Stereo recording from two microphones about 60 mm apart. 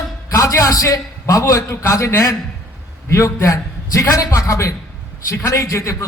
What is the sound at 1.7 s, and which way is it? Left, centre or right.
A man's voice, left.